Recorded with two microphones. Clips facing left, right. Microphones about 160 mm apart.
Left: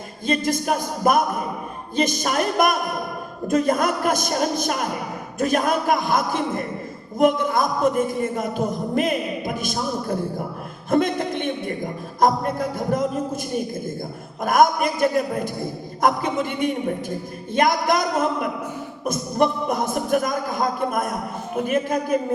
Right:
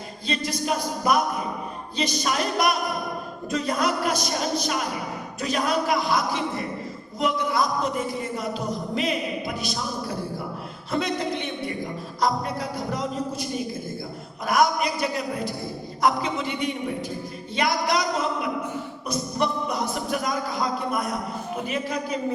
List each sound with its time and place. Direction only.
0.3 s a man's voice: 50° left (ahead or behind)